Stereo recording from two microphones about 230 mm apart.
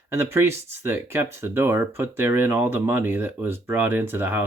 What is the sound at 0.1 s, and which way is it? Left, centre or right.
Speech, centre.